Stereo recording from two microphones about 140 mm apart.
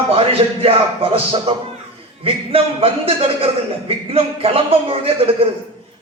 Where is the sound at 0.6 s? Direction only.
45° right (ahead or behind).